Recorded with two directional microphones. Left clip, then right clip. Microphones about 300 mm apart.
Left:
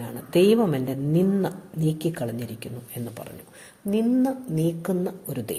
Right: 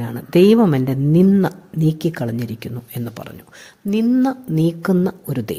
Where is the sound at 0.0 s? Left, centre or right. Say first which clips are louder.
Right 6 dB; right.